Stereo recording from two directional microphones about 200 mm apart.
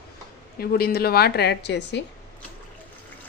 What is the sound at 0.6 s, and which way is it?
Speech, 50° left (ahead or behind).